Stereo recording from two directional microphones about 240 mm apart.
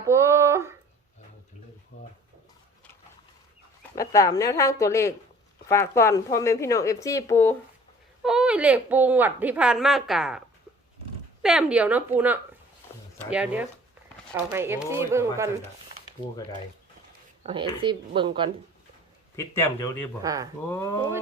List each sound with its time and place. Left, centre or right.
0.0 s a sound: centre
3.9 s a woman's voice: centre
8.2 s speech: centre
11.4 s speech: centre
17.4 s speech: centre
19.4 s a woman's voice: centre
20.2 s speech: centre
20.7 s a woman's voice: centre